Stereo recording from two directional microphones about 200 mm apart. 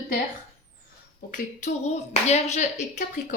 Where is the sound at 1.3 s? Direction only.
40° left (ahead or behind).